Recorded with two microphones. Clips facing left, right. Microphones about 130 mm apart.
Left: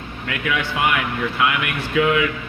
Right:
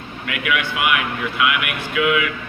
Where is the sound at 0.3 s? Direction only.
35° left (ahead or behind).